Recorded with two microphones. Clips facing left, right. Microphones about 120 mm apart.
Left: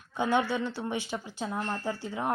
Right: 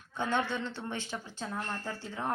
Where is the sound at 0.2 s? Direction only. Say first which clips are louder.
Left 5 dB; 10° left (ahead or behind).